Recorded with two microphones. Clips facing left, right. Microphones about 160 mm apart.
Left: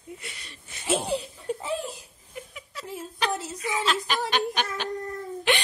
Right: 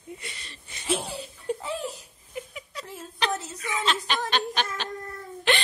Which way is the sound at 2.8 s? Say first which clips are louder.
Left 1 dB; 10° left (ahead or behind).